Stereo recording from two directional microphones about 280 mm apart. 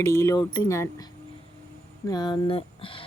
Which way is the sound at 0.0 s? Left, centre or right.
Centre.